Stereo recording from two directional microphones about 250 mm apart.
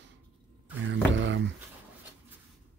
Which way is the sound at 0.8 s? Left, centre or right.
Right.